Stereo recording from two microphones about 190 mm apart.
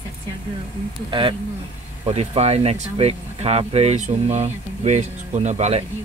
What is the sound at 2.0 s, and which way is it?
Speech, 30° right (ahead or behind).